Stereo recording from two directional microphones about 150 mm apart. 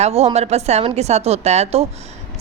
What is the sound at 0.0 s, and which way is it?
A woman's voice, 45° right (ahead or behind).